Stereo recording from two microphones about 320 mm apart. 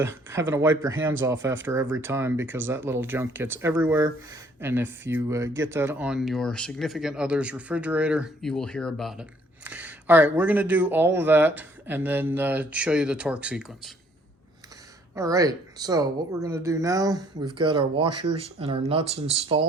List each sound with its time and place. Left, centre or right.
0.0 s speech: centre
15.1 s speech: centre